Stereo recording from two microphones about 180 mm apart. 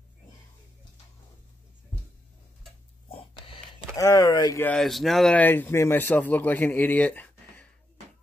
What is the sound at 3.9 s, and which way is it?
Speech, 20° left (ahead or behind).